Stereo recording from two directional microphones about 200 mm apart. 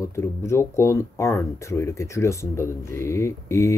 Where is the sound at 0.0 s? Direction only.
15° left (ahead or behind).